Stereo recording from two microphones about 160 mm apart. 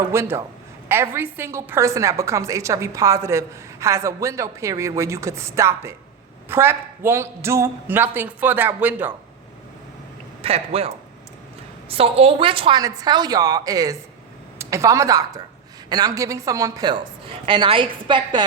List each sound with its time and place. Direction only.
0.1 s a woman's voice: 15° right (ahead or behind)
10.4 s a woman's voice: 35° right (ahead or behind)